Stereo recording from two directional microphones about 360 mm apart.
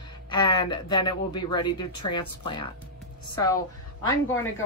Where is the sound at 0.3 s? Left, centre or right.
Centre.